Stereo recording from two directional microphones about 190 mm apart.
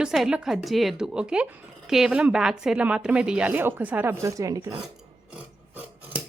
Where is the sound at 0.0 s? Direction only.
5° right (ahead or behind).